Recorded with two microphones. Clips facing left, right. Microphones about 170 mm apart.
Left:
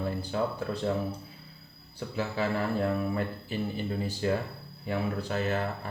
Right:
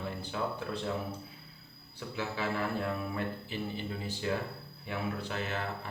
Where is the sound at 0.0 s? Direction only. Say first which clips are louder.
Left 6 dB; 40° left (ahead or behind).